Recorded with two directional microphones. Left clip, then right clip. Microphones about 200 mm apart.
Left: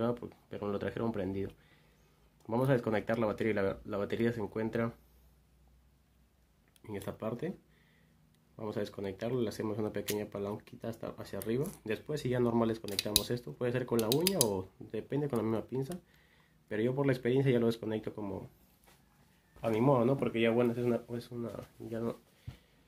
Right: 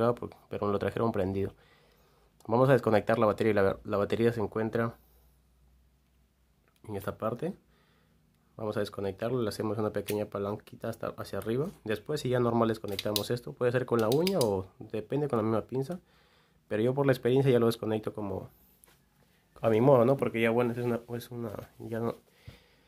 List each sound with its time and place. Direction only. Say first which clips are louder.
0.0 s speech: right 6 dB; 40° right (ahead or behind)
6.8 s speech: right 6 dB; 35° right (ahead or behind)
8.5 s speech: right 5 dB; 35° right (ahead or behind)
19.6 s speech: right 6 dB; 45° right (ahead or behind)